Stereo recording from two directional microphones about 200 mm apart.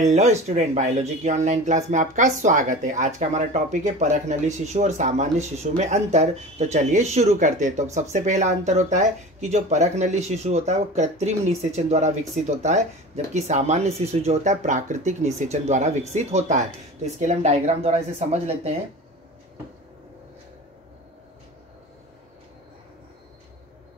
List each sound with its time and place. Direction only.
0.0 s speech: 35° right (ahead or behind)